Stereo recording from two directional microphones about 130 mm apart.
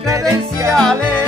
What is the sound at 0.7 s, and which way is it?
Music, 5° left (ahead or behind).